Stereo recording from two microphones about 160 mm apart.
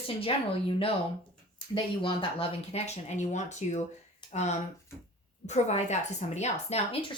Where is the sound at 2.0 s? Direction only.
35° left (ahead or behind).